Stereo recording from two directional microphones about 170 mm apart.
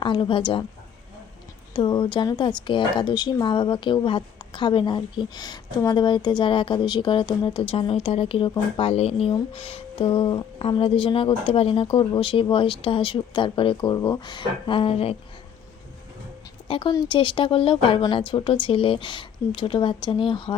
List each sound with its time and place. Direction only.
0.0 s a woman's voice: 30° left (ahead or behind)
1.7 s a woman's voice: 25° left (ahead or behind)
16.6 s a woman's voice: 30° left (ahead or behind)